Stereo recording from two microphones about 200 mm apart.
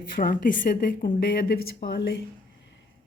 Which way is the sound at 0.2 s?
45° left (ahead or behind).